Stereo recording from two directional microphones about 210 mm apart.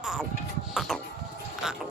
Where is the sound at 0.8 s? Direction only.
Centre (ahead or behind).